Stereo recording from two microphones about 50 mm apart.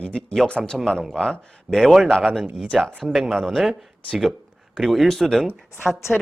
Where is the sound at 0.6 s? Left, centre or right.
Centre.